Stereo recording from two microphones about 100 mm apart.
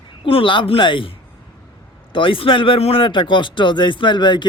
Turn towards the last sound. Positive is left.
turn(degrees=50)  # may be behind; listen again after turning